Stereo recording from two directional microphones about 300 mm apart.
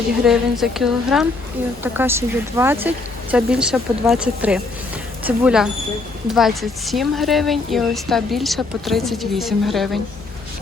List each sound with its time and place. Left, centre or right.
0.3 s a woman's voice: centre